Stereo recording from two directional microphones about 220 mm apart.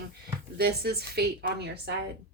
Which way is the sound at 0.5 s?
45° right (ahead or behind).